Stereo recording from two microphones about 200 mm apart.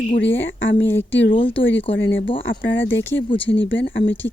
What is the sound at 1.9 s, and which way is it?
Speech, 65° left (ahead or behind).